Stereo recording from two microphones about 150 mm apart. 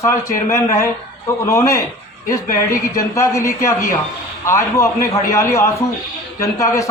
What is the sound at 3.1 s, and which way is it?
A man's voice, 20° left (ahead or behind).